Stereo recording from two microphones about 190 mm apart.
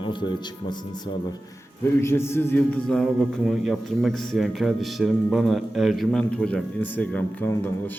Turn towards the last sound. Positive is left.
turn(degrees=10)  # may be behind; listen again after turning